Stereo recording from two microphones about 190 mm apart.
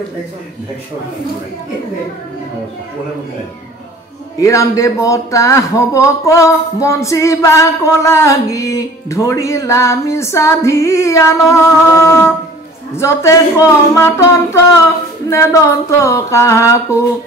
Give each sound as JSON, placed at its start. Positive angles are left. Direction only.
{"t": 4.4, "sound": "speech", "side_deg": 15}